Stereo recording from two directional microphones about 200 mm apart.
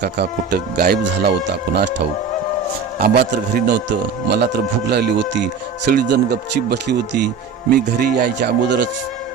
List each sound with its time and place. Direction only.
0.0 s a man's voice: 55° right (ahead or behind)
3.0 s a man's voice: 50° right (ahead or behind)